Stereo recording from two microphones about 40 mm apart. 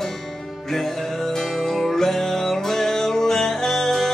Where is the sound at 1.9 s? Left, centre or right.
Centre.